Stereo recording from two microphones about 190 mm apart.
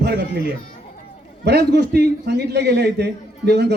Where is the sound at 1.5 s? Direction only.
60° right (ahead or behind).